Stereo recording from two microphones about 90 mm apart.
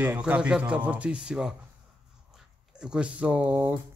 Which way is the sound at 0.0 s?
15° right (ahead or behind).